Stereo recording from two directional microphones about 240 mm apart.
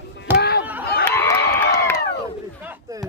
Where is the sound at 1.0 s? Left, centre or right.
Centre.